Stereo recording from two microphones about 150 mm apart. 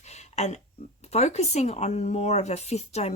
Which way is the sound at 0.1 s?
50° left (ahead or behind).